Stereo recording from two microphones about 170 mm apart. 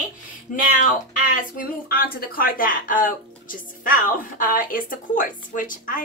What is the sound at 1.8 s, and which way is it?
A woman's voice, 60° left (ahead or behind).